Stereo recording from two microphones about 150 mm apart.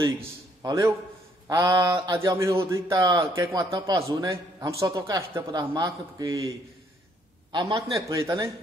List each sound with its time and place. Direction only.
0.0 s a man's voice: 25° right (ahead or behind)
7.5 s a man's voice: 25° right (ahead or behind)